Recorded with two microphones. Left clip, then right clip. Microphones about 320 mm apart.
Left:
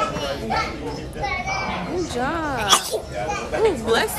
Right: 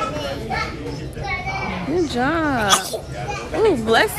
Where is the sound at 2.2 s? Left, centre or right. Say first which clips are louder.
Right 3 dB; right.